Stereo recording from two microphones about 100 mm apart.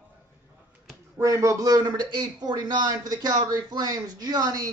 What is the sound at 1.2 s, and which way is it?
A man's voice, 30° right (ahead or behind).